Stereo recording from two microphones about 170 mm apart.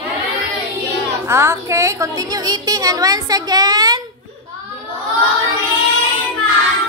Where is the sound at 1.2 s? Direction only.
15° right (ahead or behind).